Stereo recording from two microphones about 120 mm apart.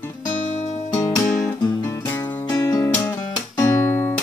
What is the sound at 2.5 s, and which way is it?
Music, 30° left (ahead or behind).